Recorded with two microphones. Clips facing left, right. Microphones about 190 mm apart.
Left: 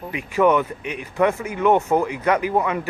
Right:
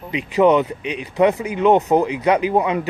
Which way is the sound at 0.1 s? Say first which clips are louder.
Right 3 dB; 20° right (ahead or behind).